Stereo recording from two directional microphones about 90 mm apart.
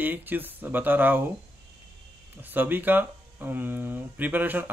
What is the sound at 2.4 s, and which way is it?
Speech, 20° right (ahead or behind).